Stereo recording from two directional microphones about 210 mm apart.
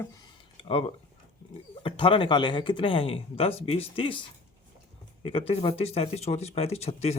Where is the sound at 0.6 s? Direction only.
30° left (ahead or behind).